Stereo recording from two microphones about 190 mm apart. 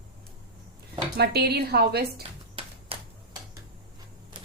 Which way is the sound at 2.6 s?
30° right (ahead or behind).